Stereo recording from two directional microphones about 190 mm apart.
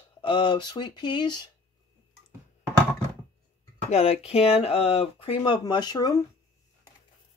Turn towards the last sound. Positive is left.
turn(degrees=20)  # may be behind; listen again after turning